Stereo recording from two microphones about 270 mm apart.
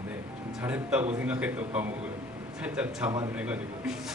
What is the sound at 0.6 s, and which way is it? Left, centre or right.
A man's voice, centre.